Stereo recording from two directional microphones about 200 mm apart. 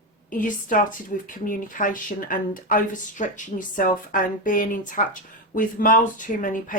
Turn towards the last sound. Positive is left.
turn(degrees=40)  # may be behind; listen again after turning